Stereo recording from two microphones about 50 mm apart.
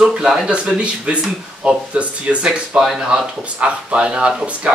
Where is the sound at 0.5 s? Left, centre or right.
Right.